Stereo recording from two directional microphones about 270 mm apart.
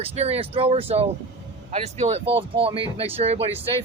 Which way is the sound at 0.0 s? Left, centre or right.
Right.